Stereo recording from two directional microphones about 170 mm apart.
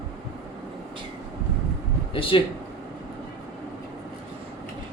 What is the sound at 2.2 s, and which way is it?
Speech, 30° left (ahead or behind).